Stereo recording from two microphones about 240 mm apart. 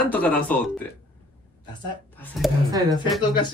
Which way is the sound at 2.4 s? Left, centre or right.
Centre.